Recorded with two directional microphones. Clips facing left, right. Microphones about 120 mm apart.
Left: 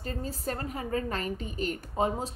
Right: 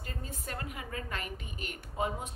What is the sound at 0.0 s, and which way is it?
Speech, 35° left (ahead or behind).